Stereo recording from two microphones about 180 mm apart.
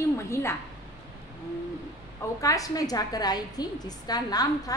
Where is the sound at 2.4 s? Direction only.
20° left (ahead or behind).